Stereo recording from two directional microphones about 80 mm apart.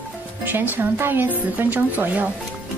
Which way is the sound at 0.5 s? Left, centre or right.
Right.